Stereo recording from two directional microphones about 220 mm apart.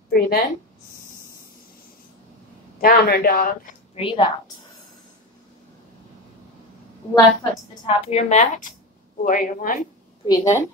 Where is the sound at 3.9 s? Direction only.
25° left (ahead or behind).